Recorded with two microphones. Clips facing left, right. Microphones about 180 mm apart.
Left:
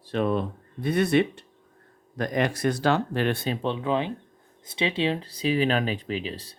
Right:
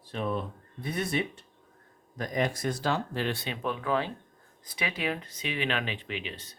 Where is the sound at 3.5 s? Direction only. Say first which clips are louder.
Left 4 dB; 25° left (ahead or behind).